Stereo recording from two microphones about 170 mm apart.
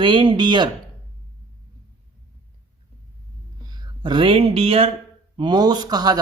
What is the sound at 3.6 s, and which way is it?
Speech, 25° right (ahead or behind).